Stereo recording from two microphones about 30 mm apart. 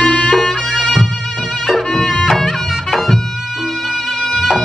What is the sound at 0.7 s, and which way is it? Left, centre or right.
Music, right.